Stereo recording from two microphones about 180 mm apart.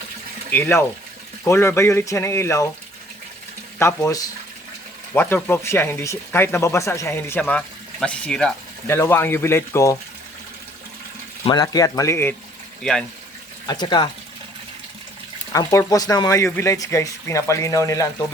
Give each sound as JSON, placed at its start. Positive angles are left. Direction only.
{"t": 0.5, "sound": "speech", "side_deg": 10}
{"t": 3.8, "sound": "speech", "side_deg": 15}
{"t": 11.4, "sound": "speech", "side_deg": 25}
{"t": 13.7, "sound": "speech", "side_deg": 25}
{"t": 15.5, "sound": "speech", "side_deg": 20}